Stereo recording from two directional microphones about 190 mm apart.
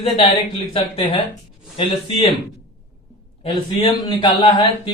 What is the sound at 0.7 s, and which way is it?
Speech, 30° left (ahead or behind).